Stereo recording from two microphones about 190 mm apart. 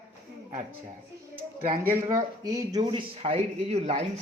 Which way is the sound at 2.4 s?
20° right (ahead or behind).